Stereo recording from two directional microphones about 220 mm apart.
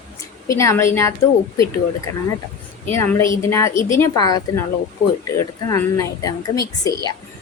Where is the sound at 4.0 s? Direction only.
15° left (ahead or behind).